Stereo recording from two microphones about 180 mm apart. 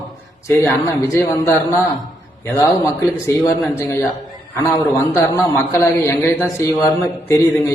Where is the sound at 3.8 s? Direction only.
15° left (ahead or behind).